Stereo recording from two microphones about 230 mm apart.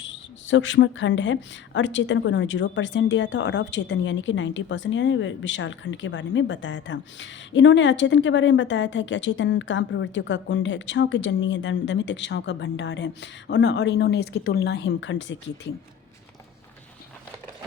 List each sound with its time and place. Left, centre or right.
0.0 s speech: left